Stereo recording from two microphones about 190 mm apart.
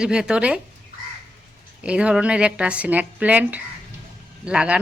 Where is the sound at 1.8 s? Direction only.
5° right (ahead or behind).